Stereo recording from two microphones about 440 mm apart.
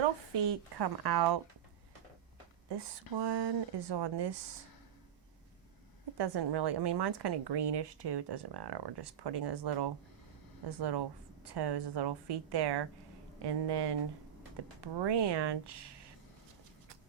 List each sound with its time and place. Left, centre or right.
0.3 s speech: right
2.6 s speech: right
6.1 s speech: right